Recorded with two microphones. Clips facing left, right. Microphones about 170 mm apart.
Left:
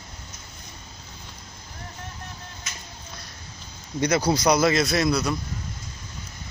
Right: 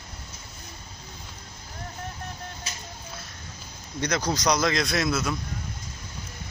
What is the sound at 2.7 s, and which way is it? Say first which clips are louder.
Music: right 1 dB; 30° right (ahead or behind).